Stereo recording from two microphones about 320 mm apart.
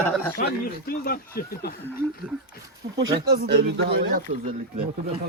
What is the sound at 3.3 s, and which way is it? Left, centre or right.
Speech, right.